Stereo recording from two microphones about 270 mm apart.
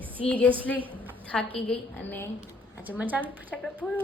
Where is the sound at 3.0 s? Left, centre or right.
Centre.